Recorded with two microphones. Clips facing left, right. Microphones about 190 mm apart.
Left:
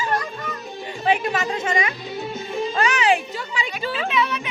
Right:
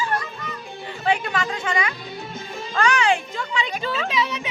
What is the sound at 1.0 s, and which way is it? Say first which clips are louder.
Music: left 2 dB; 20° left (ahead or behind).